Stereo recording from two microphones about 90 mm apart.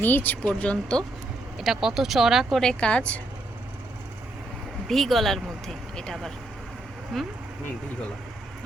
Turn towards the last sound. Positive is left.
turn(degrees=5)  # may be behind; listen again after turning